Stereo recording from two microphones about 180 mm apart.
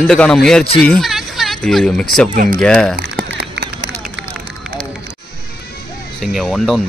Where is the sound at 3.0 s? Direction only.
60° right (ahead or behind).